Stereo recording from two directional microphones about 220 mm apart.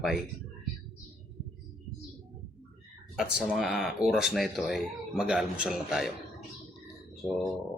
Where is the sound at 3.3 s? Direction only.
5° right (ahead or behind).